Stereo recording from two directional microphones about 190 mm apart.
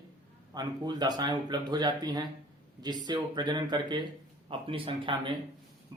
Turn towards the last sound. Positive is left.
turn(degrees=-25)  # may be behind; listen again after turning